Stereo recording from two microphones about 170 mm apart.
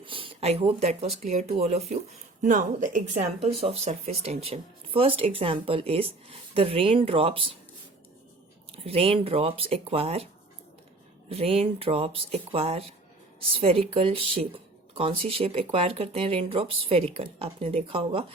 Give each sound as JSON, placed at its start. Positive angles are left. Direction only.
{"t": 0.0, "sound": "speech", "side_deg": -30}
{"t": 8.8, "sound": "speech", "side_deg": -35}
{"t": 11.3, "sound": "speech", "side_deg": -35}